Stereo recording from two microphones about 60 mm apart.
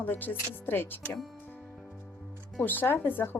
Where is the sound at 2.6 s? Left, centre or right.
Left.